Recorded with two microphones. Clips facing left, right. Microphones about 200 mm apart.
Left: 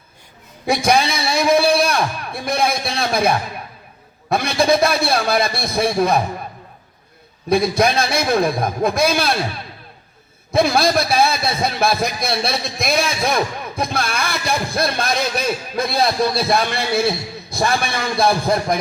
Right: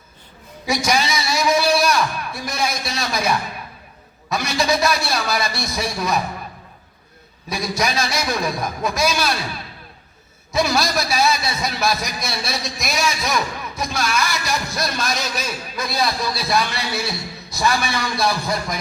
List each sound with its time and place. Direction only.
0.6 s a man's voice: 55° left (ahead or behind)
7.5 s a man's voice: 55° left (ahead or behind)
10.5 s a man's voice: 55° left (ahead or behind)